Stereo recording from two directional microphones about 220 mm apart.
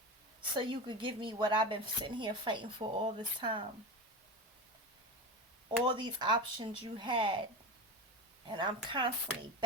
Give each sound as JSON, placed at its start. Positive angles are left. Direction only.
{"t": 0.5, "sound": "speech", "side_deg": -20}
{"t": 5.8, "sound": "speech", "side_deg": -20}
{"t": 8.4, "sound": "speech", "side_deg": -20}